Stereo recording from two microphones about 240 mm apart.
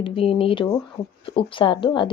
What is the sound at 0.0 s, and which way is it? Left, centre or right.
Speech, left.